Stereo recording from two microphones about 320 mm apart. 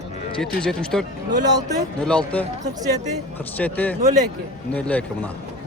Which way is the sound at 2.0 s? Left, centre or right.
Centre.